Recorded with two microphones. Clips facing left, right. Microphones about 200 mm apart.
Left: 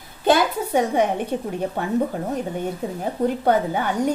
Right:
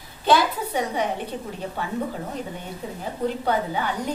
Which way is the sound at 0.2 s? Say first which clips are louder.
Left 2 dB; 50° left (ahead or behind).